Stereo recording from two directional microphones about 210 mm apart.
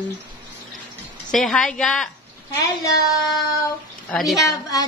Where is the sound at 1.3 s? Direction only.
Centre (ahead or behind).